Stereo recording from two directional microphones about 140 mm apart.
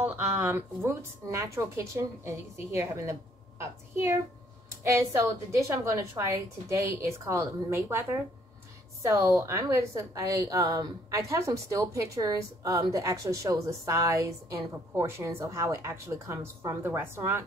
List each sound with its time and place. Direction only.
0.0 s a woman's voice: 15° right (ahead or behind)